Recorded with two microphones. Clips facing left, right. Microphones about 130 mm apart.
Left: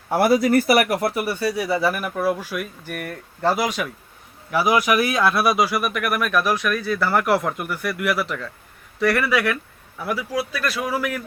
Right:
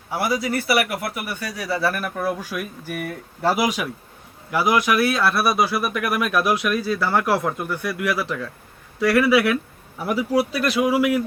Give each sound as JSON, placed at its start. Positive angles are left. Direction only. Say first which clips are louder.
{"t": 0.1, "sound": "speech", "louder": "left 6 dB", "side_deg": 50}
{"t": 4.5, "sound": "speech", "louder": "left 1 dB", "side_deg": 0}
{"t": 5.8, "sound": "speech", "louder": "even", "side_deg": -5}
{"t": 6.2, "sound": "speech", "louder": "even", "side_deg": -15}
{"t": 7.0, "sound": "speech", "louder": "left 2 dB", "side_deg": 0}
{"t": 10.0, "sound": "speech", "louder": "right 4 dB", "side_deg": -25}